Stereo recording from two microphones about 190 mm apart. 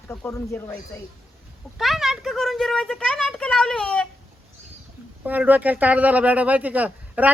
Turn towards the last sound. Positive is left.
turn(degrees=-10)  # may be behind; listen again after turning